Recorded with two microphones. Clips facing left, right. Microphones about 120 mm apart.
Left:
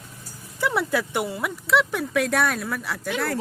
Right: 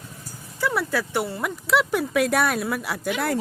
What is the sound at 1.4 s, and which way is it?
Speech, centre (ahead or behind).